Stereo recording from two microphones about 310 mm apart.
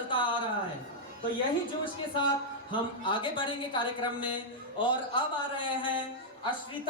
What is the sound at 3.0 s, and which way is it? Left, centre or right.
A woman's voice, centre.